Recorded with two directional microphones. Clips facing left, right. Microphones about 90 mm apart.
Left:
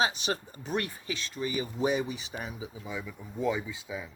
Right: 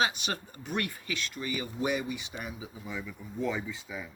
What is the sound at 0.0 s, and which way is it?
Speech, 35° left (ahead or behind).